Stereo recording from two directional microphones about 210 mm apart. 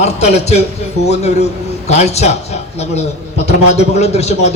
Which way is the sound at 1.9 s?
30° left (ahead or behind).